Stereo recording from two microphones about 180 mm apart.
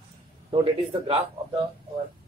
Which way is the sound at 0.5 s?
30° right (ahead or behind).